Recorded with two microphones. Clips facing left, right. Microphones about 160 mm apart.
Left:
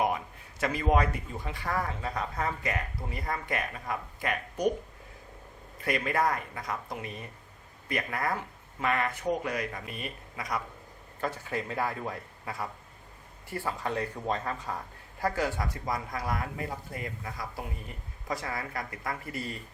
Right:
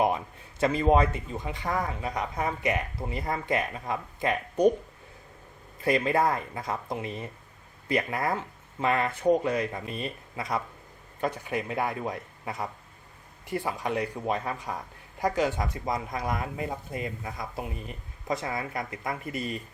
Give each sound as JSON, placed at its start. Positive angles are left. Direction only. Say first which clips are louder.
{"t": 0.6, "sound": "speech", "louder": "right 4 dB", "side_deg": -25}
{"t": 5.8, "sound": "speech", "louder": "right 4 dB", "side_deg": -25}